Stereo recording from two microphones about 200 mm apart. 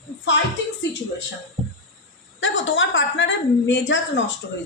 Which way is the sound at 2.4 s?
70° left (ahead or behind).